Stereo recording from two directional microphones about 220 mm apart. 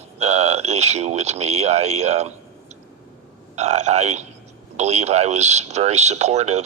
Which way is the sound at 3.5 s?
30° right (ahead or behind).